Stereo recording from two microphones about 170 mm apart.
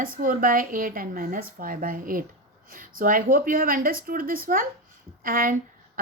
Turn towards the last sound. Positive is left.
turn(degrees=-55)  # may be behind; listen again after turning